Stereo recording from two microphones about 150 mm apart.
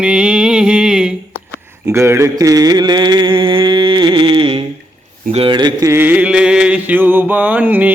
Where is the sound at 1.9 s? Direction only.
15° right (ahead or behind); by 4.6 s 35° right (ahead or behind).